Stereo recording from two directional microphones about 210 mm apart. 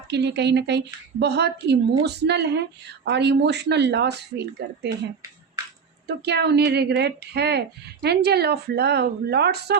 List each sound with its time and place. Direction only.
0.1 s a woman's voice: 55° right (ahead or behind)
6.1 s a woman's voice: 50° right (ahead or behind)